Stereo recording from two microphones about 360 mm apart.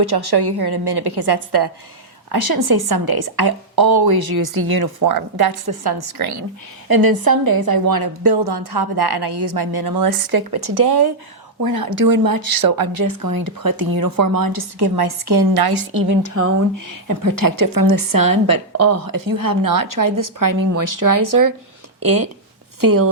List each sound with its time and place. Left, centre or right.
0.0 s a woman's voice: right
6.8 s a woman's voice: right
11.6 s a woman's voice: right